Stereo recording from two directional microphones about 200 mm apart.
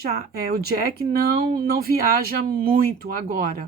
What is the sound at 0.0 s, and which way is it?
Speech, 50° right (ahead or behind).